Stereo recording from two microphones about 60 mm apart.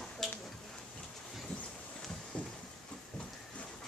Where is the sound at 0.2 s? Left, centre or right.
Centre.